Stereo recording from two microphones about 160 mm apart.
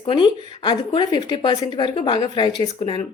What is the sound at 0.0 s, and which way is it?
A woman's voice, 30° left (ahead or behind).